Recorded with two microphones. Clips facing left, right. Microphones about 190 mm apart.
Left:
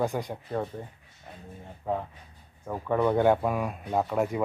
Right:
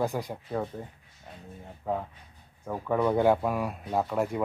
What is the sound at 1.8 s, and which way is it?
Speech, centre (ahead or behind).